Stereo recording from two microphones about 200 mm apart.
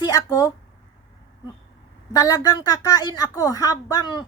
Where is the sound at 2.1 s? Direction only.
20° left (ahead or behind).